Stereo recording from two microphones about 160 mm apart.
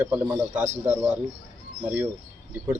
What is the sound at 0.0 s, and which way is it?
A man's voice, 10° right (ahead or behind).